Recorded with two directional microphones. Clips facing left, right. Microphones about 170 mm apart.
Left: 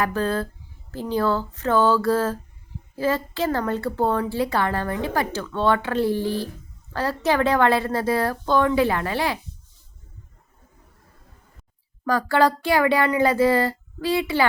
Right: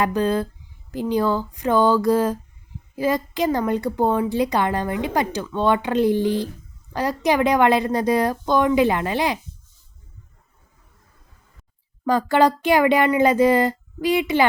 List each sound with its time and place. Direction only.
0.0 s a woman's voice: 15° right (ahead or behind)
12.0 s speech: 20° right (ahead or behind)